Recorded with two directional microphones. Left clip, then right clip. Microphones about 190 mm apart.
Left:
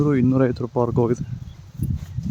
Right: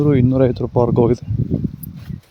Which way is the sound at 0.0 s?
10° right (ahead or behind).